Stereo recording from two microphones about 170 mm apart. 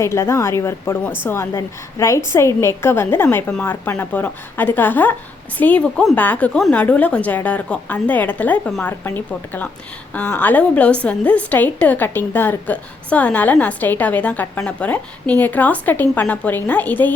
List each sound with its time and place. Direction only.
0.0 s a woman's voice: 15° left (ahead or behind)